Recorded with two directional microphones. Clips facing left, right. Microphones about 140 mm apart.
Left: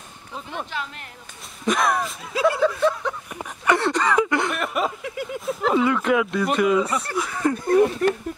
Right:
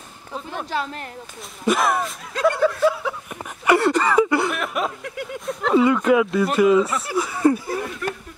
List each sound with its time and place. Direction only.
0.7 s speech: 35° right (ahead or behind)
1.7 s speech: 5° right (ahead or behind)